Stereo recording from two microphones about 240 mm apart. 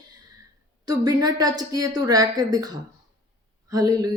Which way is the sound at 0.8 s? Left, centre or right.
Centre.